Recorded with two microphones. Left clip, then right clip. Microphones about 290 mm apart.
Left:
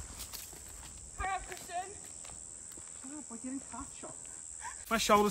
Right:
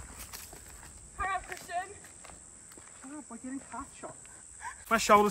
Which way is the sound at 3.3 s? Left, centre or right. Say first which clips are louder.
Right 1 dB; centre.